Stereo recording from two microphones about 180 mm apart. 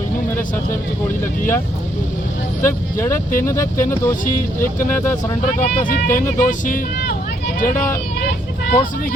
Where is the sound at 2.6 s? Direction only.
15° left (ahead or behind).